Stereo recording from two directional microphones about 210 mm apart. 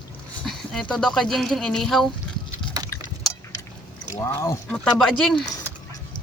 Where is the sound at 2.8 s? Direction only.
15° right (ahead or behind).